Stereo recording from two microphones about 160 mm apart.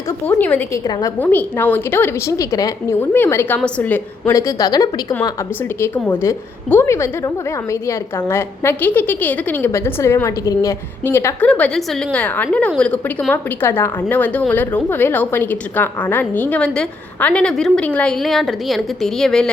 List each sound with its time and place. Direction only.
0.3 s a woman's voice: 10° left (ahead or behind)
0.9 s a woman's voice: 25° left (ahead or behind)
1.2 s a woman's voice: 10° left (ahead or behind)
5.8 s a woman's voice: 15° left (ahead or behind)